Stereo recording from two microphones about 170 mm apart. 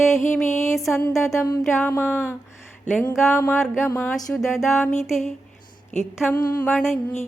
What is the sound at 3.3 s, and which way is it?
Music, 15° left (ahead or behind).